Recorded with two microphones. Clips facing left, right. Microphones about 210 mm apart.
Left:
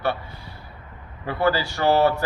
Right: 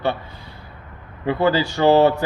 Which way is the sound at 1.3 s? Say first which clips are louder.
Right 4 dB; 15° right (ahead or behind).